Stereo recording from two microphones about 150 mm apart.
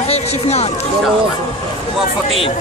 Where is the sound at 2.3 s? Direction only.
40° left (ahead or behind).